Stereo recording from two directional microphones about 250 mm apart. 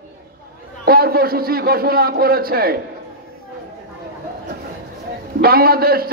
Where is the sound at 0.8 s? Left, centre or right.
Right.